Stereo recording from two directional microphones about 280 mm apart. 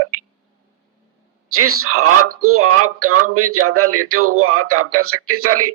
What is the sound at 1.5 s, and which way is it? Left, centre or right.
Speech, right.